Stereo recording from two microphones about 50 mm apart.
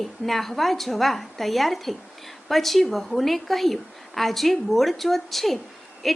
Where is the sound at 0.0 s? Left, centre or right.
Centre.